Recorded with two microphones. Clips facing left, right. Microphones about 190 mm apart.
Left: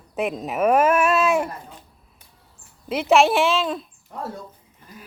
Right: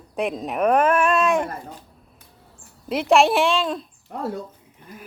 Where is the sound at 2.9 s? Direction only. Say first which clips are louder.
Even; centre (ahead or behind).